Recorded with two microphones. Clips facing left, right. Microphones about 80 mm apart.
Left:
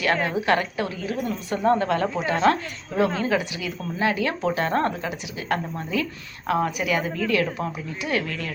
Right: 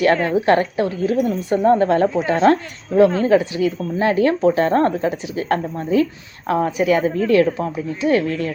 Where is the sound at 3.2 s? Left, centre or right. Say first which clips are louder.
Right 9 dB; right.